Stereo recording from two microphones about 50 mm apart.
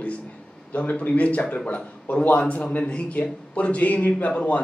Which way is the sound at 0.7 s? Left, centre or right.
Left.